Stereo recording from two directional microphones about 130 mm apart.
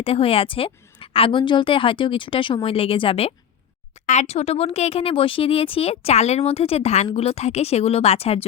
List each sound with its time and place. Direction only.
0.0 s speech: 45° left (ahead or behind)
4.0 s speech: 60° left (ahead or behind)